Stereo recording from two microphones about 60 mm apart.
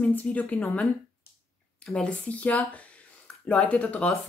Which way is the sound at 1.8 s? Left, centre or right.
Centre.